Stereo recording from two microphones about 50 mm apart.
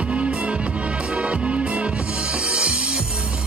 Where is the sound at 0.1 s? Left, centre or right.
Right.